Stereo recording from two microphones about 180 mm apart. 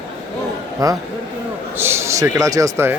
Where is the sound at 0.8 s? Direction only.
20° right (ahead or behind).